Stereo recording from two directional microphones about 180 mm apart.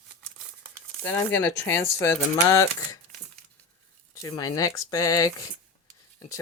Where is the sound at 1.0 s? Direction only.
10° left (ahead or behind).